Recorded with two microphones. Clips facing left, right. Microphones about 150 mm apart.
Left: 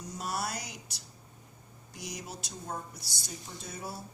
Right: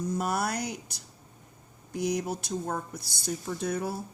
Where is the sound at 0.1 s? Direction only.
55° right (ahead or behind).